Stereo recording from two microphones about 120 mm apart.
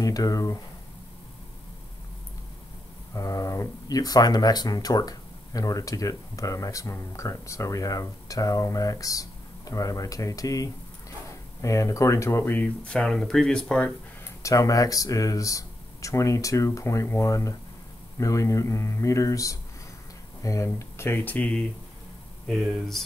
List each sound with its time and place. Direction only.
0.0 s speech: 30° left (ahead or behind)
3.2 s speech: 30° left (ahead or behind); by 13.9 s 5° left (ahead or behind)
14.2 s speech: 25° left (ahead or behind); by 23.0 s centre (ahead or behind)